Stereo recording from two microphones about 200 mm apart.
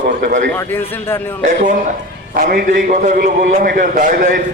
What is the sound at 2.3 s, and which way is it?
A man's voice, 45° right (ahead or behind).